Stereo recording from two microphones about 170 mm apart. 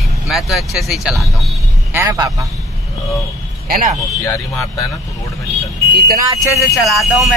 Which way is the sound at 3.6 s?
55° right (ahead or behind).